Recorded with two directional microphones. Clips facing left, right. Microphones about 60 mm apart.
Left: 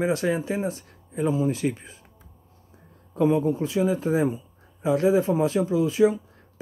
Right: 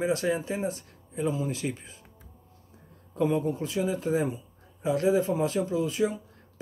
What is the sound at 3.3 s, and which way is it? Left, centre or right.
Speech, left.